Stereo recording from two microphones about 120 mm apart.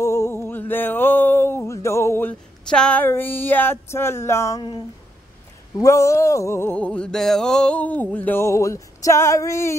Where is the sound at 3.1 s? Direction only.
15° left (ahead or behind).